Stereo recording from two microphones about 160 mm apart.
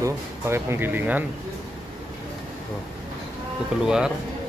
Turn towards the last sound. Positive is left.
turn(degrees=-5)  # may be behind; listen again after turning